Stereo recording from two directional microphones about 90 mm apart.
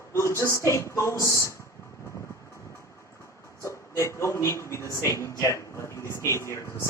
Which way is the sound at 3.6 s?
30° left (ahead or behind).